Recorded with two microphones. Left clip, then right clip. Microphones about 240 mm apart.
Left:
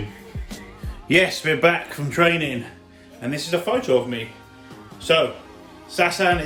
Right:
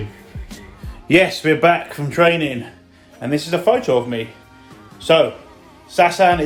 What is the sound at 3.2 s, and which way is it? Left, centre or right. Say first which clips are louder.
Speech: right 6 dB; right.